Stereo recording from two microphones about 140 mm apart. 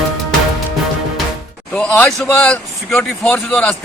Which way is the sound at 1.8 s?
5° left (ahead or behind).